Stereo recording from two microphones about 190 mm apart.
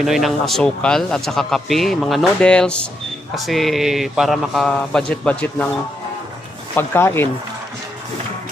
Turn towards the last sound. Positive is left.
turn(degrees=15)  # may be behind; listen again after turning